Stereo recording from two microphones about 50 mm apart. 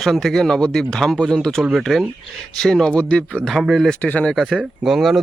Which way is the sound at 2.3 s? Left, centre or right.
Centre.